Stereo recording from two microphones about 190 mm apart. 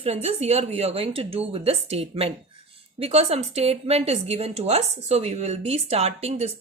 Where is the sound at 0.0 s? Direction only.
30° right (ahead or behind).